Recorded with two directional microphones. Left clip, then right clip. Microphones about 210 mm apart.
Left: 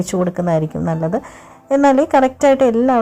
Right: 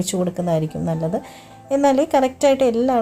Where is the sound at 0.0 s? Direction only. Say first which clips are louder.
Left 4 dB; 20° left (ahead or behind).